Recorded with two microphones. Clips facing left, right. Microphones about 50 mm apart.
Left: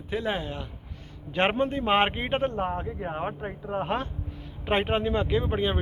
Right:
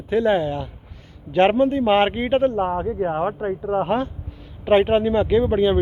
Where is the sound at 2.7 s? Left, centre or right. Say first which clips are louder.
Right 9 dB; right.